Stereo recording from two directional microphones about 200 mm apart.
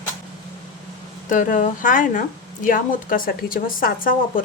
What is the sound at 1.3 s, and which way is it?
Speech, 40° left (ahead or behind).